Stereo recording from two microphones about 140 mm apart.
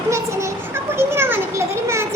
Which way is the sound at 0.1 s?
20° right (ahead or behind).